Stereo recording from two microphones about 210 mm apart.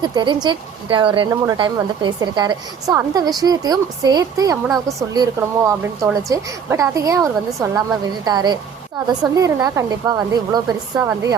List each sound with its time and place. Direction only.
0.0 s speech: 20° right (ahead or behind)